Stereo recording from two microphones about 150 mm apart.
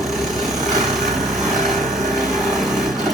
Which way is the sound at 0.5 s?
25° right (ahead or behind).